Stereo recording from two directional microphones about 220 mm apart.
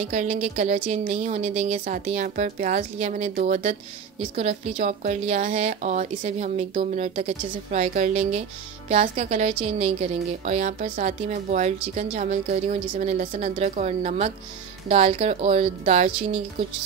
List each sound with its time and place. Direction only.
0.0 s a woman's voice: 30° right (ahead or behind)